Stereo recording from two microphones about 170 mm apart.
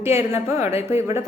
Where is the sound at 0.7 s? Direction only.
35° left (ahead or behind).